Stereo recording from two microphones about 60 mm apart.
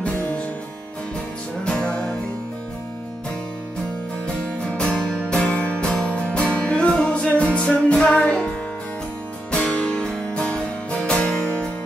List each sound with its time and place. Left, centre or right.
0.0 s music: left
1.6 s music: centre
4.4 s music: centre
9.5 s music: centre
10.0 s music: centre
10.4 s music: centre